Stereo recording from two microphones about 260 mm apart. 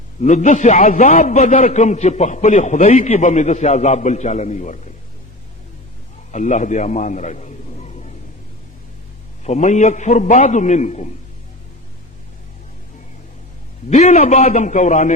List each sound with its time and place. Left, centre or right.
0.2 s a man's voice: left
6.3 s a man's voice: left
9.4 s a man's voice: left
13.9 s a man's voice: left